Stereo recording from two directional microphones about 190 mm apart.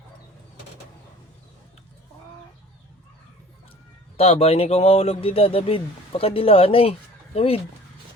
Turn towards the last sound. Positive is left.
turn(degrees=30)  # may be behind; listen again after turning